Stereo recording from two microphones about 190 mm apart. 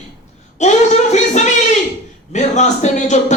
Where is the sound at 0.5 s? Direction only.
40° left (ahead or behind).